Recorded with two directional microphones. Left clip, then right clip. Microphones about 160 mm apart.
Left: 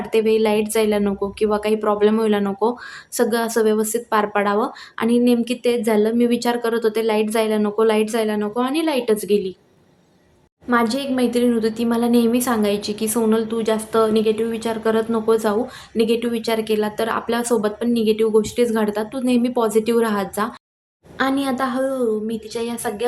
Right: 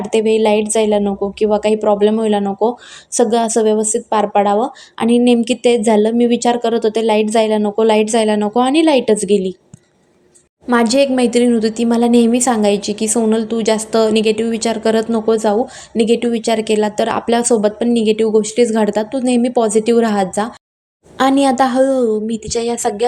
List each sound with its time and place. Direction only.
0.1 s a woman's voice: 20° right (ahead or behind)
4.9 s a woman's voice: 25° right (ahead or behind)
10.7 s a woman's voice: 45° right (ahead or behind); by 20.5 s 25° right (ahead or behind)
21.2 s a woman's voice: 40° right (ahead or behind)